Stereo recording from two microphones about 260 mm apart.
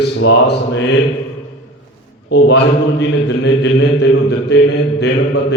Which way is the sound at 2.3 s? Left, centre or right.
Left.